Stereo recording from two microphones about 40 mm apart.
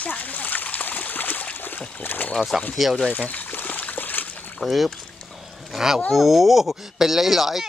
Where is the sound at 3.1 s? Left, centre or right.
Left.